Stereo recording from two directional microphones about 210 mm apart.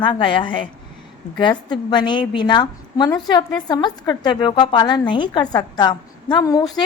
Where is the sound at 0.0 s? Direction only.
25° left (ahead or behind).